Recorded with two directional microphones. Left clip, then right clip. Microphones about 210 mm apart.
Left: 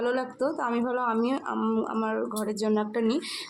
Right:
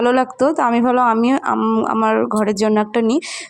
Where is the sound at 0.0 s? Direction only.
35° right (ahead or behind).